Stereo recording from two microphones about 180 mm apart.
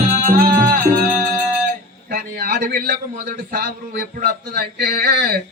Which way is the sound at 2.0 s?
45° right (ahead or behind).